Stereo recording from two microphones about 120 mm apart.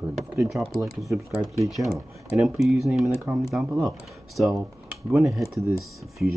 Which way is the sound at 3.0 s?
15° right (ahead or behind).